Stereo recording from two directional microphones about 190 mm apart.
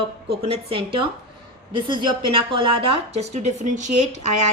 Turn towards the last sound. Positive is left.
turn(degrees=-35)  # may be behind; listen again after turning